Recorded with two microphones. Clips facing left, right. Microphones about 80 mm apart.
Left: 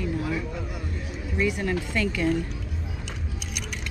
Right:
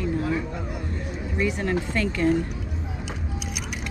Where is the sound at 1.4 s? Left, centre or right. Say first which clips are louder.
Right 1 dB; right.